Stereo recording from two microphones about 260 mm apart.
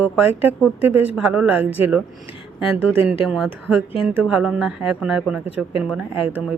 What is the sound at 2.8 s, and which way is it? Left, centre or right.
Speech, right.